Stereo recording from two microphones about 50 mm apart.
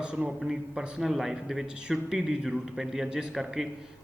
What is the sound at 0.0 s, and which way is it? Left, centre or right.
Speech, right.